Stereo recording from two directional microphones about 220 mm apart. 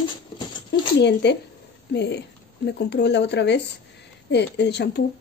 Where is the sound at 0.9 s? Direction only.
50° left (ahead or behind).